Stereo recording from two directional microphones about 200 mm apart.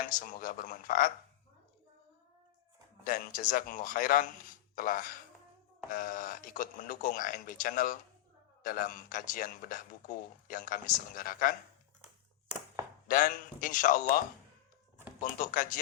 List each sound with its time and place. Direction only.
0.1 s a man's voice: 45° left (ahead or behind)
3.0 s a man's voice: 45° left (ahead or behind)
13.1 s a man's voice: 40° left (ahead or behind)
15.2 s a man's voice: 40° left (ahead or behind)